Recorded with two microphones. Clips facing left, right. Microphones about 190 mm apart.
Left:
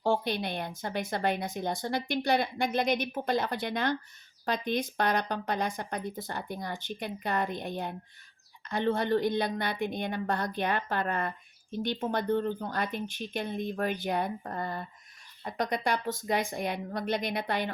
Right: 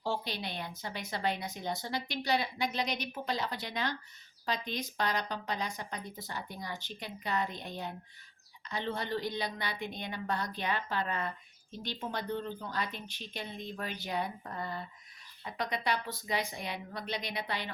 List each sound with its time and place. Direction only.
0.0 s a woman's voice: 55° left (ahead or behind)